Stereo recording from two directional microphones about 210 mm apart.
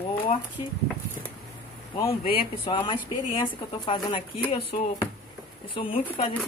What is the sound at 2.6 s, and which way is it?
Speech, 25° left (ahead or behind).